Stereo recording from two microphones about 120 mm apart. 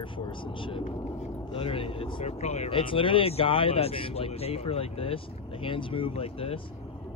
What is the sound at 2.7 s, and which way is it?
Speech, 45° left (ahead or behind).